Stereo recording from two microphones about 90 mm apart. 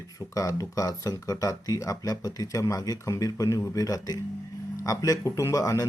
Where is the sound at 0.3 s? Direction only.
40° left (ahead or behind).